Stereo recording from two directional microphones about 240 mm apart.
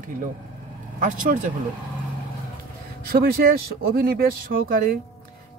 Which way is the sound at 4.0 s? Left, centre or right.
Right.